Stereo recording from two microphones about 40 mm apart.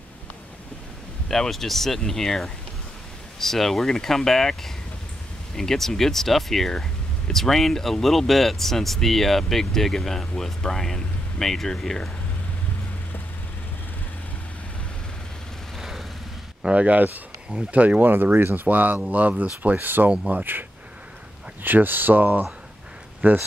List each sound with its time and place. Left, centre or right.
1.3 s speech: centre
15.8 s a sound: centre
16.7 s speech: right
18.0 s speech: right
21.6 s speech: right